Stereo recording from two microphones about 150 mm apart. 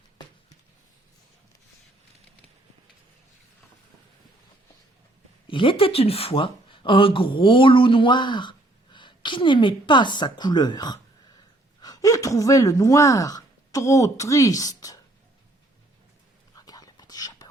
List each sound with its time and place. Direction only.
5.5 s speech: 35° left (ahead or behind)
16.6 s whispering: 25° left (ahead or behind)